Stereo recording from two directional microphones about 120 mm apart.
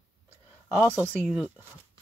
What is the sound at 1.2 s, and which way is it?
Speech, 15° right (ahead or behind).